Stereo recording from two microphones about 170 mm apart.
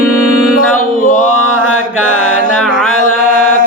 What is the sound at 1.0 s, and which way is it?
Music, 50° left (ahead or behind).